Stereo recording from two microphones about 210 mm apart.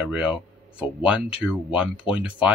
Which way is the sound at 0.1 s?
5° right (ahead or behind).